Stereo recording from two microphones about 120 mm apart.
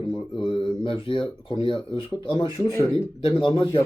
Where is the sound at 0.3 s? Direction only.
40° left (ahead or behind).